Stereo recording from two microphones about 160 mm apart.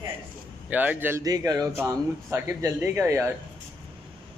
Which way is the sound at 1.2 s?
25° right (ahead or behind).